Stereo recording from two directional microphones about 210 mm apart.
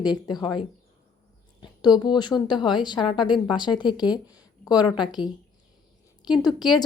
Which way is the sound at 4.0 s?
5° right (ahead or behind).